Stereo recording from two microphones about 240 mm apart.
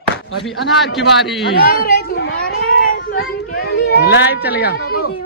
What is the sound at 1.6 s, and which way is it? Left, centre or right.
Children playing, left.